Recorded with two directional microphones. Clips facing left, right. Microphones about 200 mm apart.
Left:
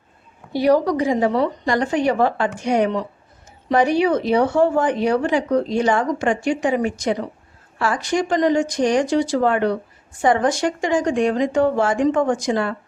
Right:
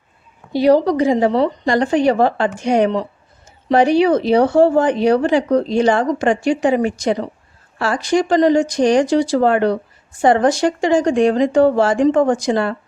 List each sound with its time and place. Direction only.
0.5 s a woman's voice: 25° right (ahead or behind)